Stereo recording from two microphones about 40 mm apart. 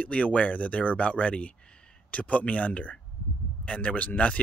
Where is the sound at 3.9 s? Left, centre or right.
Left.